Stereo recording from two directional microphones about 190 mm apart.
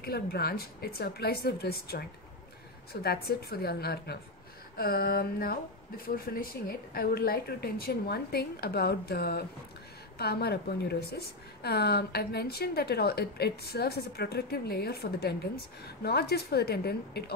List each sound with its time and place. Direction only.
0.0 s a woman's voice: 55° left (ahead or behind)